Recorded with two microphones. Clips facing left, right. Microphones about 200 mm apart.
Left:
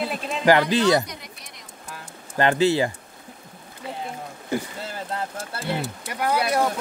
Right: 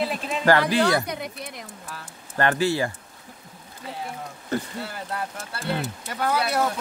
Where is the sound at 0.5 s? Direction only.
20° left (ahead or behind).